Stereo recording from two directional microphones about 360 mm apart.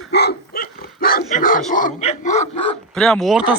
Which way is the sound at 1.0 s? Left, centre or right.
Left.